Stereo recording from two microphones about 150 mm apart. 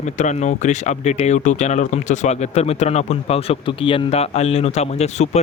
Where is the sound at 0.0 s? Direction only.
50° left (ahead or behind).